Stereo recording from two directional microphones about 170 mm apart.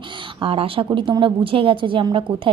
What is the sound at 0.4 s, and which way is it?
A woman's voice, 30° right (ahead or behind).